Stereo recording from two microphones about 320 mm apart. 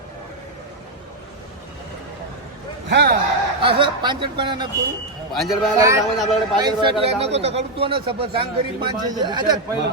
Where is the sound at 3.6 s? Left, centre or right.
Centre.